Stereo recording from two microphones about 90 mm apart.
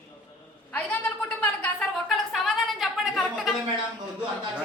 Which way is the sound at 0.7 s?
15° left (ahead or behind).